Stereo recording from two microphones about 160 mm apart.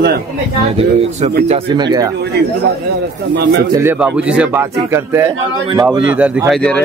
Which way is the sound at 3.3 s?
90° right.